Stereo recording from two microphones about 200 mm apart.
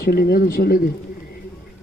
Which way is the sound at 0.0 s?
50° left (ahead or behind).